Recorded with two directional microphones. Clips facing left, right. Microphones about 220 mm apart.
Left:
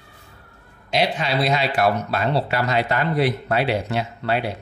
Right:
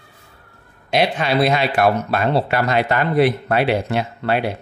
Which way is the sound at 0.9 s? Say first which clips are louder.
Right 4 dB; 55° right (ahead or behind).